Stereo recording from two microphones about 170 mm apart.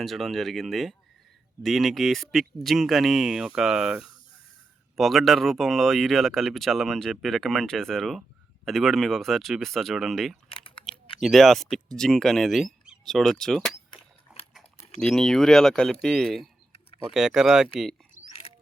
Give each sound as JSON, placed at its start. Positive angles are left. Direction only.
{"t": 0.0, "sound": "speech", "side_deg": 0}
{"t": 10.5, "sound": "biting", "side_deg": 30}
{"t": 11.2, "sound": "speech", "side_deg": 0}
{"t": 14.3, "sound": "dog", "side_deg": -5}
{"t": 15.0, "sound": "speech", "side_deg": 5}